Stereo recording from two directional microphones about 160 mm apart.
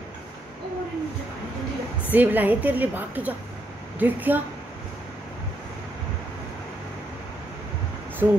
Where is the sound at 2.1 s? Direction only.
10° right (ahead or behind).